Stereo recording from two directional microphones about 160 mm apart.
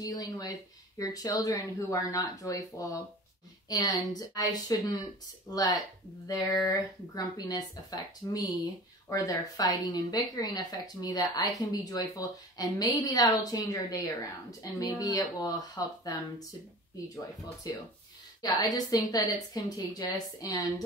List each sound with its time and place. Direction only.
0.0 s speech: 25° left (ahead or behind)
17.6 s speech: 20° left (ahead or behind)